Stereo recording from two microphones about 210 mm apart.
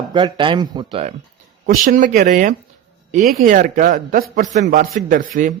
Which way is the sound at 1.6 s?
40° right (ahead or behind).